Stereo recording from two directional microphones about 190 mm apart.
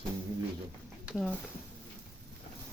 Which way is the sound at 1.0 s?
Centre (ahead or behind).